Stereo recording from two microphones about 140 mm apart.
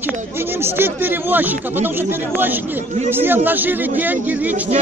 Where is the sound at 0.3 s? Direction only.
15° right (ahead or behind).